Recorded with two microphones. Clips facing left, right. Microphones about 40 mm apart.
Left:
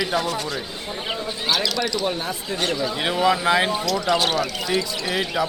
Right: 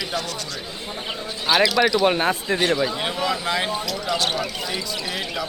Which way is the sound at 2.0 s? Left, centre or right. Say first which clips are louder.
Right 6 dB; right.